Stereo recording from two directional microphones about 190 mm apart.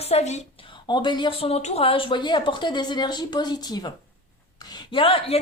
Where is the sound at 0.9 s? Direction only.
25° left (ahead or behind).